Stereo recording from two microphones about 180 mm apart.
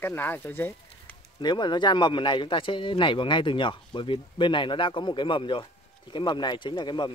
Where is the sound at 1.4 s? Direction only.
25° left (ahead or behind).